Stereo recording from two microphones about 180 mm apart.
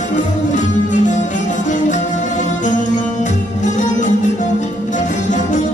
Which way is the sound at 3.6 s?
45° left (ahead or behind).